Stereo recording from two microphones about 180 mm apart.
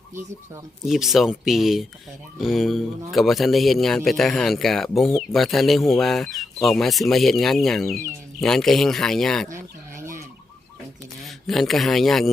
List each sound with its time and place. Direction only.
0.9 s a man's voice: centre (ahead or behind)
10.0 s fowl: 15° right (ahead or behind)
11.2 s speech: centre (ahead or behind)